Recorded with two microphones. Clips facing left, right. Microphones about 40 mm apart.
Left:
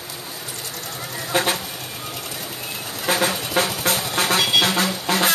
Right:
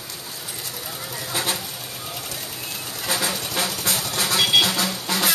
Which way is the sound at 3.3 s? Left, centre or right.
Centre.